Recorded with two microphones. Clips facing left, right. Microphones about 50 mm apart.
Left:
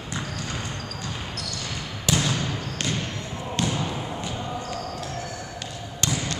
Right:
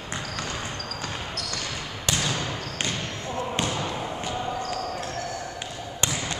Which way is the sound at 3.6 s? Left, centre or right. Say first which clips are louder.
Left 3 dB; right.